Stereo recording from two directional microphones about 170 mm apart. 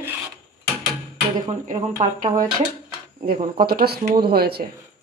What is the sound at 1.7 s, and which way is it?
Speech, 50° right (ahead or behind).